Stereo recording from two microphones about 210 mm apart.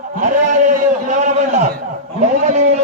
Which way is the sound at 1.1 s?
35° right (ahead or behind).